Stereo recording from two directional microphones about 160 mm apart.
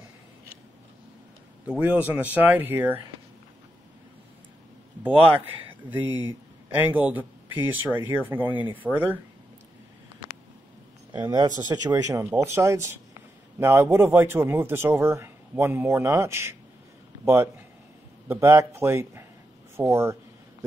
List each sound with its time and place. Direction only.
1.7 s speech: 10° right (ahead or behind)
6.0 s speech: 10° right (ahead or behind)
11.1 s a man's voice: 25° right (ahead or behind)